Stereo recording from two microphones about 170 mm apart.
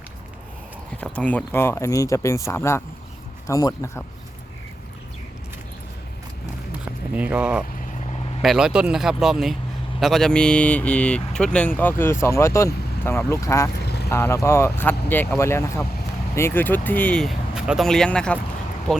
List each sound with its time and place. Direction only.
1.0 s speech: 10° left (ahead or behind)
6.8 s vehicle: 10° right (ahead or behind)
8.4 s speech: 5° right (ahead or behind); by 13.7 s 15° left (ahead or behind)
13.8 s vehicle: 75° left (ahead or behind)
14.1 s speech: 15° left (ahead or behind)